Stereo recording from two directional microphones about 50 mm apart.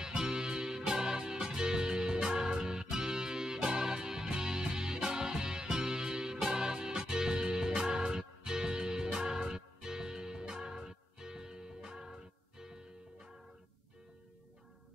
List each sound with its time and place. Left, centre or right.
0.0 s music: centre